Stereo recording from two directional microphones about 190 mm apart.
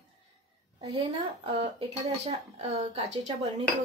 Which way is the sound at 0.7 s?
25° right (ahead or behind).